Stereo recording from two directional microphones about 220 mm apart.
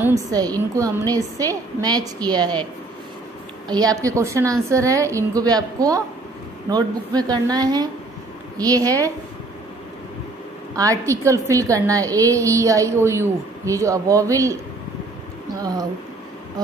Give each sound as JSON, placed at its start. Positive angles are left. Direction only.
{"t": 0.3, "sound": "a woman's voice", "side_deg": -15}
{"t": 3.6, "sound": "a woman's voice", "side_deg": -15}
{"t": 10.8, "sound": "a woman's voice", "side_deg": -15}
{"t": 15.6, "sound": "a woman's voice", "side_deg": -15}